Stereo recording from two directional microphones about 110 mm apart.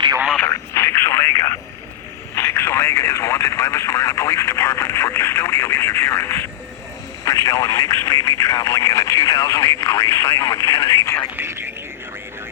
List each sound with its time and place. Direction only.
0.4 s radio: 25° left (ahead or behind)
2.3 s speech: 20° left (ahead or behind)
11.3 s speech: 20° right (ahead or behind)